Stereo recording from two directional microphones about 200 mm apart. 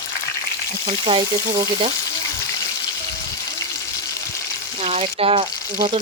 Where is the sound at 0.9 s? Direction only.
25° right (ahead or behind).